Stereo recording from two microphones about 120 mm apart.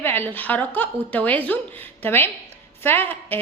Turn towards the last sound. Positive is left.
turn(degrees=15)  # may be behind; listen again after turning